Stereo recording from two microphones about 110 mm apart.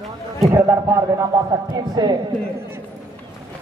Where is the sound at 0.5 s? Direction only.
30° right (ahead or behind).